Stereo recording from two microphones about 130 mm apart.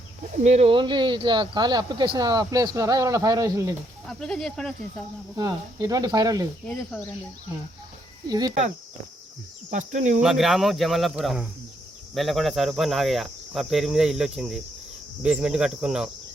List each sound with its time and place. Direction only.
0.4 s speech: 60° right (ahead or behind)
0.7 s speech: 35° right (ahead or behind)
4.0 s cricket: 5° left (ahead or behind)
5.4 s speech: 30° right (ahead or behind)
8.3 s speech: 30° right (ahead or behind)
9.6 s cricket: 70° right (ahead or behind)
10.2 s cricket: 5° right (ahead or behind)